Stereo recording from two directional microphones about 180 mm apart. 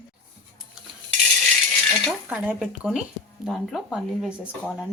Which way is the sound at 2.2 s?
5° right (ahead or behind).